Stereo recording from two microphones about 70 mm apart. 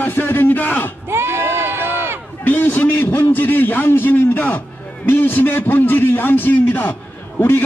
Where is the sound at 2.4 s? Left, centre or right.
Left.